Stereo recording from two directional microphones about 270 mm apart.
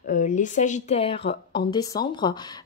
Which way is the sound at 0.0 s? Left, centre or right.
Left.